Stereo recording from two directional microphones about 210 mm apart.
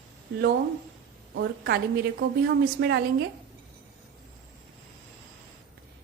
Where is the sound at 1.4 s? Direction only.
50° right (ahead or behind).